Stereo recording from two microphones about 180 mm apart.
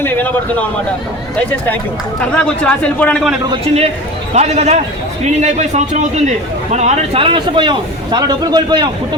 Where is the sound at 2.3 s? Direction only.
5° left (ahead or behind).